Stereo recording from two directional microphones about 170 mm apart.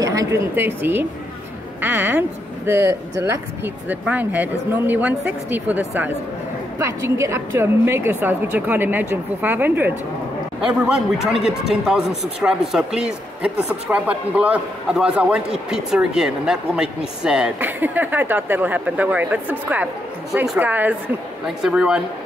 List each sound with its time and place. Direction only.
0.0 s a woman's voice: 20° right (ahead or behind); by 22.0 s 5° right (ahead or behind)